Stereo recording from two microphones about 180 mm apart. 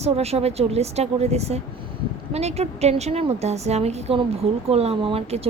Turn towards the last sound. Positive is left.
turn(degrees=-35)  # may be behind; listen again after turning